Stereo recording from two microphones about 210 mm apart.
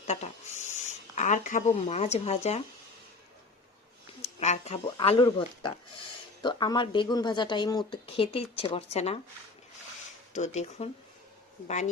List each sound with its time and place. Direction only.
0.1 s speech: 30° left (ahead or behind)
4.2 s speech: 30° left (ahead or behind)
10.3 s speech: 35° left (ahead or behind)